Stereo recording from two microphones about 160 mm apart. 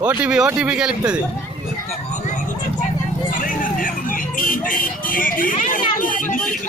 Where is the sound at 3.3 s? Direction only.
60° left (ahead or behind).